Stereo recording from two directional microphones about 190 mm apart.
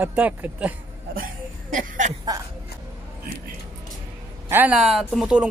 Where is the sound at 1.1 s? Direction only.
45° right (ahead or behind).